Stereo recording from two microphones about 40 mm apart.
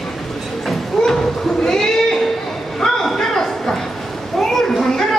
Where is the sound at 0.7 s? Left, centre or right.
Centre.